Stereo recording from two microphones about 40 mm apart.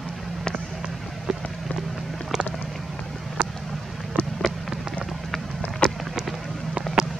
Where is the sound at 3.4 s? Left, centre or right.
Right.